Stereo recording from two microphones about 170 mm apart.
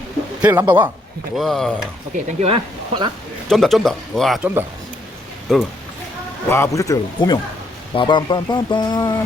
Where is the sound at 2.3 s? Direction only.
35° right (ahead or behind).